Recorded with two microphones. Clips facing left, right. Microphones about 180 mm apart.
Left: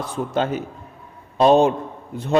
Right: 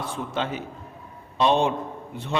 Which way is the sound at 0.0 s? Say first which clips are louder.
Left 6 dB; 45° left (ahead or behind).